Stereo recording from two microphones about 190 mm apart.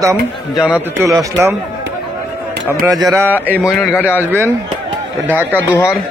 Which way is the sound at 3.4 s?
10° right (ahead or behind).